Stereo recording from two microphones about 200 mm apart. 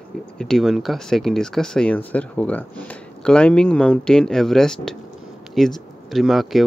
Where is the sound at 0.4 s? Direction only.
Centre (ahead or behind).